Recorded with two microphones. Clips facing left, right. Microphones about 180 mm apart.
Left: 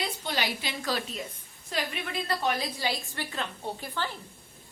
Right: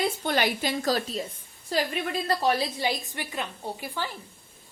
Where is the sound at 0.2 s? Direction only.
50° right (ahead or behind); by 1.9 s 35° right (ahead or behind).